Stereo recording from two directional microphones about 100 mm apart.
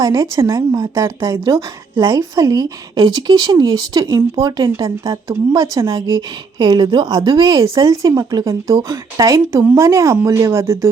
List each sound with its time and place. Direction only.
0.0 s a woman's voice: 30° right (ahead or behind)
5.0 s a woman's voice: 30° right (ahead or behind); by 7.6 s 50° right (ahead or behind)
7.6 s a woman's voice: 35° right (ahead or behind)